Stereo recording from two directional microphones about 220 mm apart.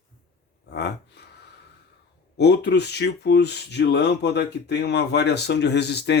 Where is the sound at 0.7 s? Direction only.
50° left (ahead or behind).